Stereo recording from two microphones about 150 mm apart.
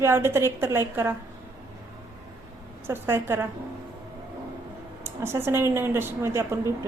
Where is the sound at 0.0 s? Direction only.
15° right (ahead or behind).